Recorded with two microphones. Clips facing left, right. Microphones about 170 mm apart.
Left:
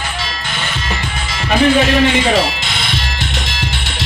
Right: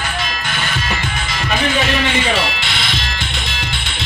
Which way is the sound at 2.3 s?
40° left (ahead or behind).